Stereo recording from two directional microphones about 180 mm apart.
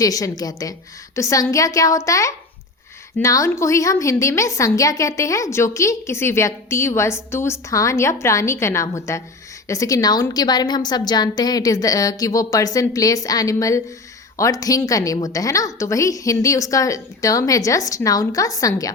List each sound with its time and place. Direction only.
0.0 s a woman's voice: 20° left (ahead or behind)